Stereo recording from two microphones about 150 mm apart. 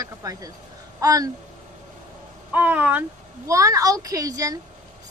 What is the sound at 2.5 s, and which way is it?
Speech, 10° right (ahead or behind).